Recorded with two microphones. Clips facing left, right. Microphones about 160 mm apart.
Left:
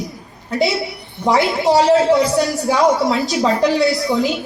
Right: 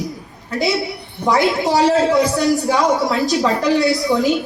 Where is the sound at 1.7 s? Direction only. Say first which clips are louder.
Left 4 dB; 20° left (ahead or behind).